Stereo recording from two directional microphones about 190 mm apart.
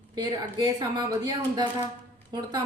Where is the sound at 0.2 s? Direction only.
20° right (ahead or behind).